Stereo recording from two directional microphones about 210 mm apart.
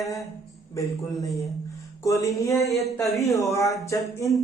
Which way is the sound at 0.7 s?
15° left (ahead or behind).